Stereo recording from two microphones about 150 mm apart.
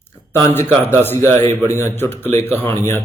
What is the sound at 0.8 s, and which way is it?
A man's voice, 15° left (ahead or behind).